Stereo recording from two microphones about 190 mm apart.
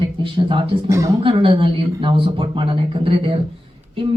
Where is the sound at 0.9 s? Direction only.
15° right (ahead or behind).